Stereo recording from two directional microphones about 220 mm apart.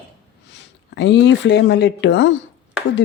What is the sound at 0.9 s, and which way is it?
Speech, 55° left (ahead or behind).